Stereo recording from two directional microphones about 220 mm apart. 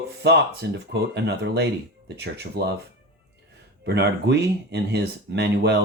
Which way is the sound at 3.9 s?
50° right (ahead or behind).